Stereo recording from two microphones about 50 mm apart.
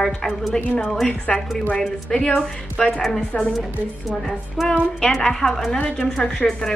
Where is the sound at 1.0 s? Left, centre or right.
Centre.